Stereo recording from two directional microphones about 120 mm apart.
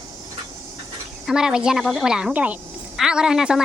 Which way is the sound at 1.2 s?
5° right (ahead or behind).